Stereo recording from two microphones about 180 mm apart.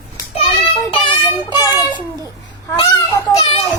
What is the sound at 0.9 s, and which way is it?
A child's voice, 25° left (ahead or behind).